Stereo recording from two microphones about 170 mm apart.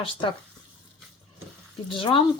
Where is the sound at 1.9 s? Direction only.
30° left (ahead or behind).